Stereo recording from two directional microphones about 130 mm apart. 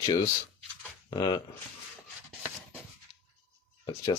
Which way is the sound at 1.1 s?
30° left (ahead or behind).